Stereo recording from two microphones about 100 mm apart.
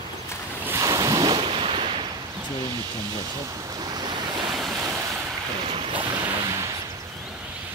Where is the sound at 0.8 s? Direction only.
35° right (ahead or behind).